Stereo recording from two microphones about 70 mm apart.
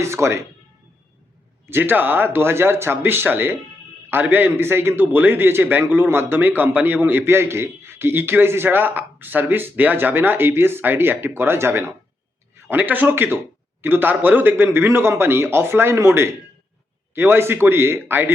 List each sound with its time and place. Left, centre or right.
0.0 s speech: right
1.6 s a man's voice: right
12.6 s a man's voice: right